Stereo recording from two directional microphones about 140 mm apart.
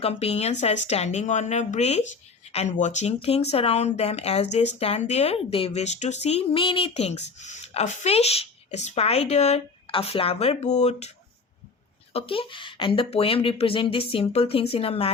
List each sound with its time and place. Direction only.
0.0 s speech: 45° left (ahead or behind)
12.1 s speech: 40° left (ahead or behind)